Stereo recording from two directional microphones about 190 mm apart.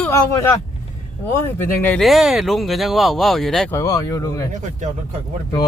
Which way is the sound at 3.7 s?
20° left (ahead or behind).